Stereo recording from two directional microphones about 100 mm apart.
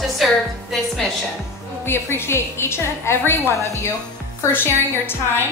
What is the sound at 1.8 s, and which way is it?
A woman's voice, 25° left (ahead or behind).